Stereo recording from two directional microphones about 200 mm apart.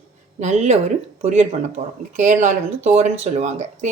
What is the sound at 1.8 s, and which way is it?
A woman's voice, 30° right (ahead or behind).